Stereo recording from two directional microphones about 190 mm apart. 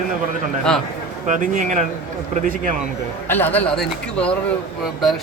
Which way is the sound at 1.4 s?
40° right (ahead or behind).